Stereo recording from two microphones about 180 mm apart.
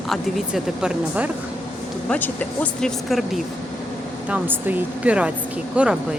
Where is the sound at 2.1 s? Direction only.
10° left (ahead or behind).